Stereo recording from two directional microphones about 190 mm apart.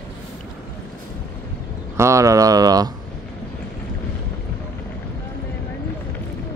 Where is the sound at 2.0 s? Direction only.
15° right (ahead or behind).